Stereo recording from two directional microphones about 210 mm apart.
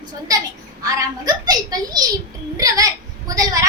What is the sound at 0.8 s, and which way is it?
A child's voice, 15° right (ahead or behind).